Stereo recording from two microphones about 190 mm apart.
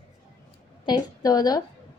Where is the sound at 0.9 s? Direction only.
20° left (ahead or behind).